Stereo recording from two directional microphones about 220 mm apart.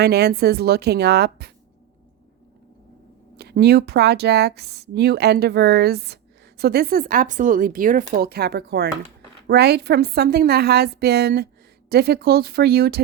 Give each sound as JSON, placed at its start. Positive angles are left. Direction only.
{"t": 0.0, "sound": "speech", "side_deg": -45}
{"t": 3.3, "sound": "speech", "side_deg": -50}